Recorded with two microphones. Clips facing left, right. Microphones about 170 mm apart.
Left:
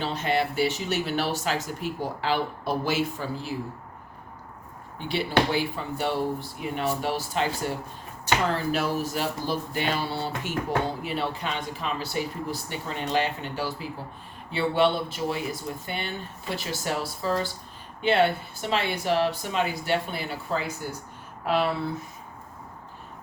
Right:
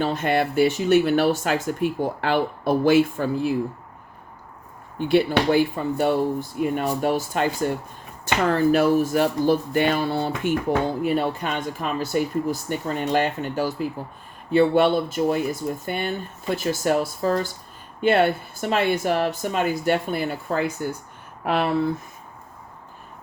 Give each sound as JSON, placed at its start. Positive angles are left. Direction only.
{"t": 0.0, "sound": "speech", "side_deg": -50}
{"t": 4.9, "sound": "speech", "side_deg": -50}